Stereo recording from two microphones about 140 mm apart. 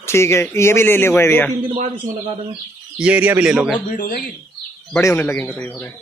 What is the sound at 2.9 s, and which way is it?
Speech, 10° right (ahead or behind).